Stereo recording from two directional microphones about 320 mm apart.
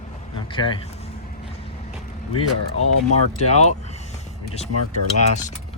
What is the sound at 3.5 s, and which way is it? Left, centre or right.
Speech, left.